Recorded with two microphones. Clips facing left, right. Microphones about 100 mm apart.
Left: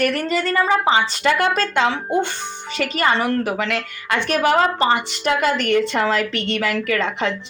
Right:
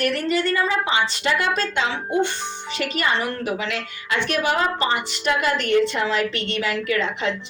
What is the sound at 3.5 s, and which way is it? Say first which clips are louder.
Speech: left 4 dB; 60° left (ahead or behind).